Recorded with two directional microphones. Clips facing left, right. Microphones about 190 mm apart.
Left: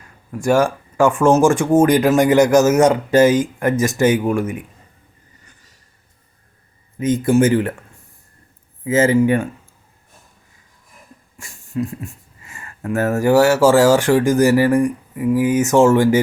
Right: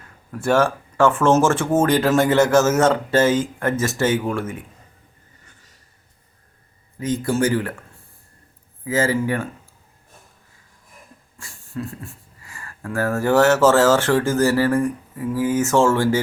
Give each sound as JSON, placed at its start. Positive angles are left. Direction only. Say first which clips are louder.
{"t": 0.3, "sound": "speech", "louder": "left 2 dB", "side_deg": 10}
{"t": 7.0, "sound": "speech", "louder": "left 6 dB", "side_deg": 20}
{"t": 8.8, "sound": "speech", "louder": "left 6 dB", "side_deg": 20}
{"t": 11.3, "sound": "speech", "louder": "left 7 dB", "side_deg": 15}